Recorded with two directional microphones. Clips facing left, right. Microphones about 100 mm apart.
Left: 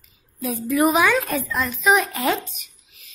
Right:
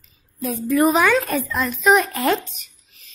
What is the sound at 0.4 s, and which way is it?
Speech, 5° left (ahead or behind).